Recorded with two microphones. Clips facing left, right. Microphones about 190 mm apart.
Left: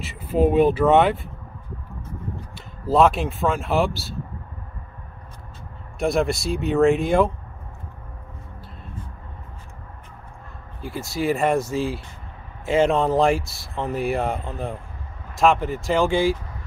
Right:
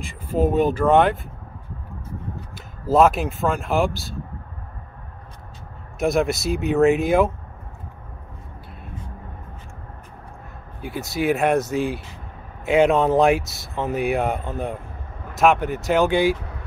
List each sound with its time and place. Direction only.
0.0 s speech: 10° left (ahead or behind)
2.5 s speech: centre (ahead or behind)
5.9 s speech: centre (ahead or behind)
10.9 s speech: centre (ahead or behind)